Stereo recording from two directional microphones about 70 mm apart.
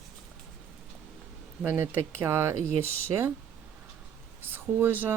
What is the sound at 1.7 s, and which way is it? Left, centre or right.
Speech, right.